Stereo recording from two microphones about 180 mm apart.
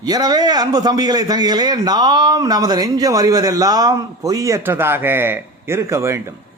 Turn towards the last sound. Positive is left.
turn(degrees=-15)  # may be behind; listen again after turning